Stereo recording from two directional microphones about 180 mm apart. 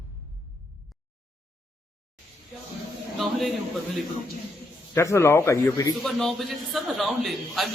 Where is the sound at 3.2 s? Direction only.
Centre (ahead or behind).